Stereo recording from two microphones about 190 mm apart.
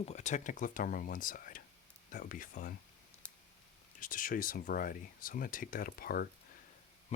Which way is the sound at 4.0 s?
45° left (ahead or behind).